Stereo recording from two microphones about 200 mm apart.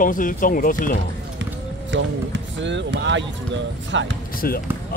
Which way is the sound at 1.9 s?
65° right (ahead or behind).